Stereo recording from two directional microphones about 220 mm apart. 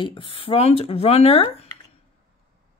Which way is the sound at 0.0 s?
25° left (ahead or behind).